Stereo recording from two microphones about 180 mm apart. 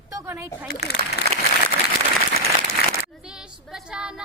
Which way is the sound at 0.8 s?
65° left (ahead or behind).